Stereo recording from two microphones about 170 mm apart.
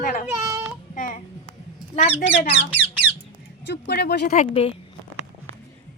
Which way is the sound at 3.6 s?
80° left.